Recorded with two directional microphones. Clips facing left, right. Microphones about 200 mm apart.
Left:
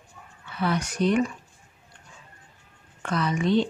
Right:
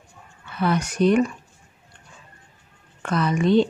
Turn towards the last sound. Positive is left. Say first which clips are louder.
# right 4 dB
turn(degrees=-55)  # may be behind; listen again after turning